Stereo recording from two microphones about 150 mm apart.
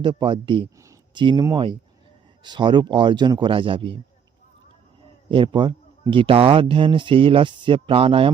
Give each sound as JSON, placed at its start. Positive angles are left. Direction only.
{"t": 0.0, "sound": "a man's voice", "side_deg": -30}
{"t": 5.3, "sound": "a man's voice", "side_deg": -35}